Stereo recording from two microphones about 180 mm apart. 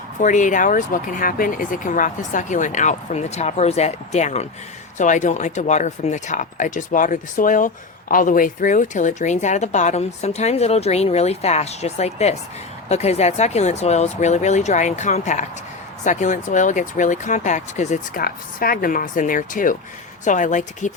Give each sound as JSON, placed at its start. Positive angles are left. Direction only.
{"t": 0.2, "sound": "speech", "side_deg": 45}